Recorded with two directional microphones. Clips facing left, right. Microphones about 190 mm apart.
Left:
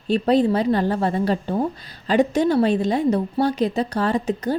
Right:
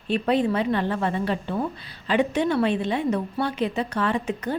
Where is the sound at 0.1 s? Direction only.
35° left (ahead or behind).